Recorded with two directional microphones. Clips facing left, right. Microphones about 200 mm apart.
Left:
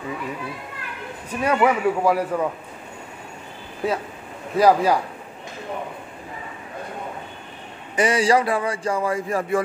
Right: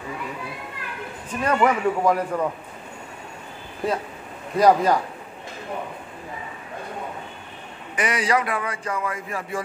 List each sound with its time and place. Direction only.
1.4 s a man's voice: 10° left (ahead or behind)
3.8 s a man's voice: centre (ahead or behind)
7.9 s speech: 30° left (ahead or behind)